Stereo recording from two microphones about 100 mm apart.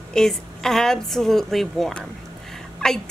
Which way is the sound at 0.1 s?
5° left (ahead or behind).